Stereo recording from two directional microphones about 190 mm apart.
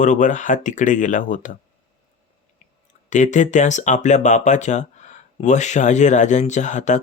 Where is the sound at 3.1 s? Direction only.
40° left (ahead or behind).